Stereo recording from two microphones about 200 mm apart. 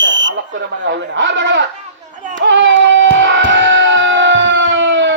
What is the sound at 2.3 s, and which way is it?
Music, 65° right (ahead or behind).